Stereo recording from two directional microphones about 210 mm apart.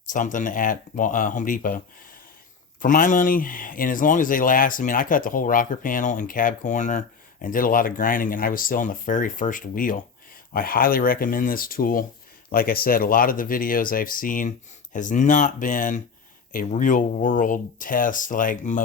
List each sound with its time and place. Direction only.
0.1 s speech: 35° left (ahead or behind)
2.8 s speech: 40° left (ahead or behind)